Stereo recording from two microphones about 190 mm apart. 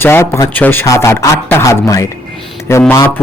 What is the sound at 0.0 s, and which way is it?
A man's voice, 10° left (ahead or behind).